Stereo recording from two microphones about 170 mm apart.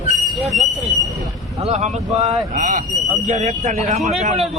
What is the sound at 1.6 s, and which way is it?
A man's voice, 45° right (ahead or behind).